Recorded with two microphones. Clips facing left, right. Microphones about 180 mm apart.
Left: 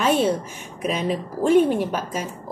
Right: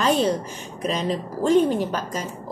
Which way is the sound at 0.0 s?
5° left (ahead or behind).